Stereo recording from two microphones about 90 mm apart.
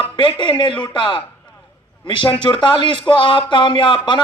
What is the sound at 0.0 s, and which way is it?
A man's voice, 70° left (ahead or behind).